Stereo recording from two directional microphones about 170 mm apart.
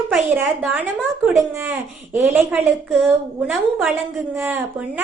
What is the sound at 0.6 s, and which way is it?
A woman's voice, 5° right (ahead or behind).